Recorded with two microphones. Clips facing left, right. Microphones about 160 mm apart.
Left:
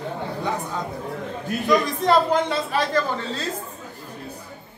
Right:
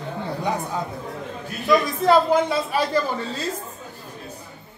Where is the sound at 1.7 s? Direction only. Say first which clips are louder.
Right 2 dB; 5° right (ahead or behind).